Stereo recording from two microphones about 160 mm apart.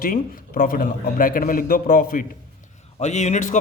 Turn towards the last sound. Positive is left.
turn(degrees=50)  # may be behind; listen again after turning